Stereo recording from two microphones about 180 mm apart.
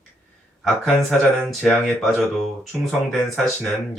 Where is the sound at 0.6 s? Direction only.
Centre (ahead or behind).